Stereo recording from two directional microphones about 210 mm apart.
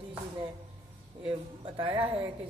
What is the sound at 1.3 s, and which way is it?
Speech, 25° right (ahead or behind).